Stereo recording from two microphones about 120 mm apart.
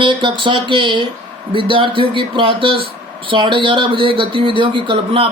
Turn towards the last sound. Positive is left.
turn(degrees=-45)  # may be behind; listen again after turning